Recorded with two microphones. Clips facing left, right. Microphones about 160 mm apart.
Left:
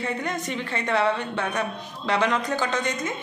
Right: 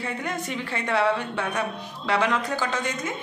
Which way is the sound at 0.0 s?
5° right (ahead or behind).